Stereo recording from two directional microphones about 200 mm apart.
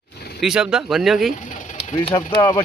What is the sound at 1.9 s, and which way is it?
Speech, 20° left (ahead or behind).